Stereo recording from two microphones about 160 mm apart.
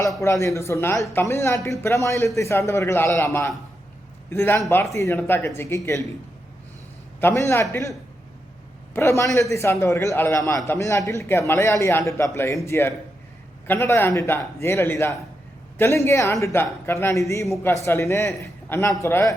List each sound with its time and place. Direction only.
0.2 s a man's voice: 20° left (ahead or behind)
7.2 s a man's voice: 15° left (ahead or behind)